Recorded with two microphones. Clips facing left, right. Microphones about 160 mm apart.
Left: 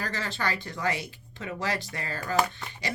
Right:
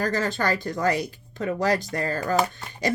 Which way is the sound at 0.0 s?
45° right (ahead or behind).